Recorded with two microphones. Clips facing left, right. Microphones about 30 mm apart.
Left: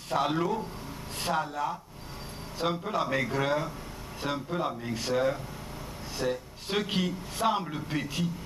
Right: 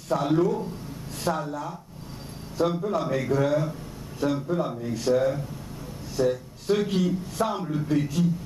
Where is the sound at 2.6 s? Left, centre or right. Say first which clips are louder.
Right 4 dB; left.